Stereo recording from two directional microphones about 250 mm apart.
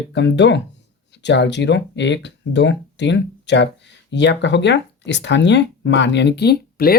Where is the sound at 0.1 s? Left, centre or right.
Left.